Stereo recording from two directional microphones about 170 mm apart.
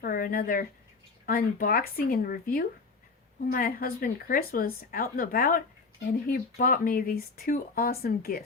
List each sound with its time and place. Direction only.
0.0 s speech: 55° left (ahead or behind)